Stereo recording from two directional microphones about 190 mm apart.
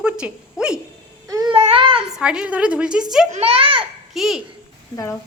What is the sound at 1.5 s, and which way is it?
Babbling, 30° right (ahead or behind).